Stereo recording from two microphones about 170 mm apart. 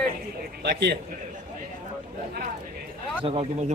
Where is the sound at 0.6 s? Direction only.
75° right (ahead or behind).